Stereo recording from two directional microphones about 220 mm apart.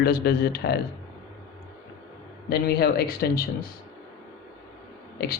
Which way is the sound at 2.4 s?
45° left (ahead or behind).